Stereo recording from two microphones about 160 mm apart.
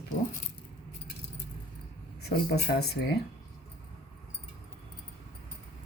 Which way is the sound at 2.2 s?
90° left.